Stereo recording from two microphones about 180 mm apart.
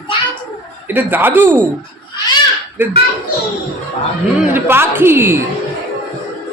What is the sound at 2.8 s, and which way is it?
Speech, 10° right (ahead or behind).